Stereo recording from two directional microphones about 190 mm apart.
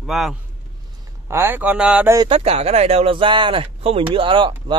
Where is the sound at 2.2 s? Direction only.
30° right (ahead or behind).